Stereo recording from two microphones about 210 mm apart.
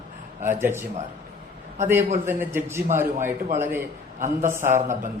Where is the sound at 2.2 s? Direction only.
10° right (ahead or behind).